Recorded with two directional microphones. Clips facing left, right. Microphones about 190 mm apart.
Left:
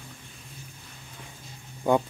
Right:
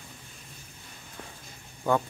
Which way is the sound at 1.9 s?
15° left (ahead or behind).